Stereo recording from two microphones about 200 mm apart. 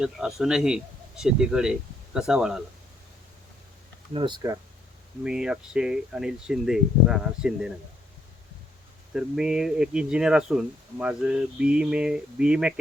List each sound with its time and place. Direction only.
0.0 s speech: 5° right (ahead or behind)
4.1 s speech: 25° right (ahead or behind)
5.2 s speech: 5° right (ahead or behind)
9.1 s speech: centre (ahead or behind)